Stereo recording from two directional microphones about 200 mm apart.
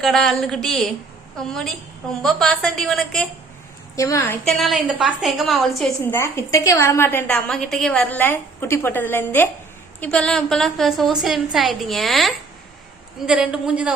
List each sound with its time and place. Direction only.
0.0 s a woman's voice: centre (ahead or behind)
3.9 s a woman's voice: 15° left (ahead or behind)
4.4 s a woman's voice: centre (ahead or behind)
6.1 s a woman's voice: 15° left (ahead or behind); by 13.9 s 5° right (ahead or behind)